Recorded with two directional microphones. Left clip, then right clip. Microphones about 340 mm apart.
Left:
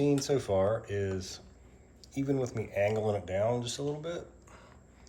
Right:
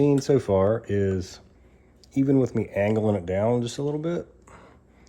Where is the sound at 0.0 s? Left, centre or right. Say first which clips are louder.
Right 8 dB; right.